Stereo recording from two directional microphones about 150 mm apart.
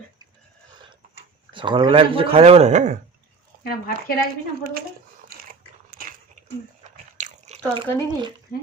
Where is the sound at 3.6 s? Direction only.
80° left.